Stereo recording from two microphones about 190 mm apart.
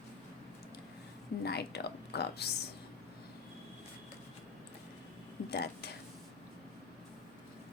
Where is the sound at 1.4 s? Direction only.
60° left (ahead or behind).